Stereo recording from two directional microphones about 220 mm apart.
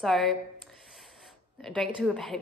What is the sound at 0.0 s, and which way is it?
Speech, centre (ahead or behind).